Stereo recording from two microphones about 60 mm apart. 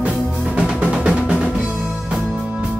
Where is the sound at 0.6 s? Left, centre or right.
Centre.